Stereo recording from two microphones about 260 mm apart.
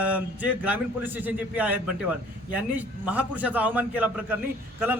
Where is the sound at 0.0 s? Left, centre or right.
Centre.